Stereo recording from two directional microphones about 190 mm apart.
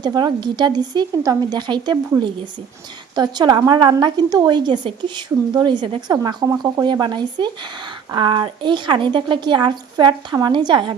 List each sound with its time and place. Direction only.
0.0 s a woman's voice: 20° right (ahead or behind)